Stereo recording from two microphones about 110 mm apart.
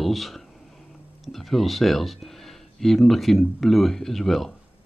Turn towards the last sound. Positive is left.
turn(degrees=0)  # may be behind; listen again after turning